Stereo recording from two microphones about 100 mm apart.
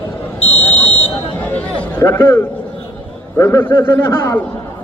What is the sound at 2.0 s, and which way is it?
A man's voice, 25° left (ahead or behind).